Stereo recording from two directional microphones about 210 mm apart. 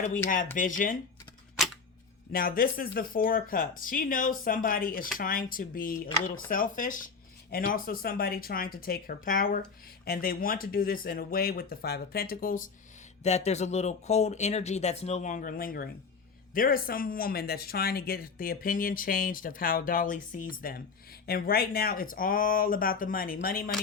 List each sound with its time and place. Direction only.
0.5 s speech: 40° left (ahead or behind)
2.3 s speech: 45° left (ahead or behind)
13.2 s speech: 30° left (ahead or behind)